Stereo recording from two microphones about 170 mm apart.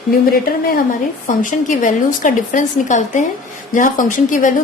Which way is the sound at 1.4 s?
50° left (ahead or behind).